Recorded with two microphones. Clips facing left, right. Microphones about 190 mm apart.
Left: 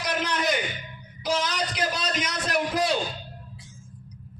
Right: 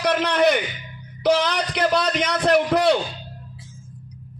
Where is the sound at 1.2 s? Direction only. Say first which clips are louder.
Right 7 dB; 60° right (ahead or behind).